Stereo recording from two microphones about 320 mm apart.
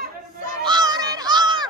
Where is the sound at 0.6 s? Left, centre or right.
Centre.